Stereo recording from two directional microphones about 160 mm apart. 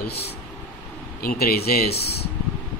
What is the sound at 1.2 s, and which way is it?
Speech, 70° left (ahead or behind).